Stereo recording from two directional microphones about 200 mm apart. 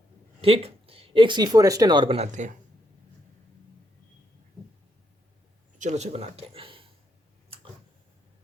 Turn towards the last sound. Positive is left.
turn(degrees=-25)  # may be behind; listen again after turning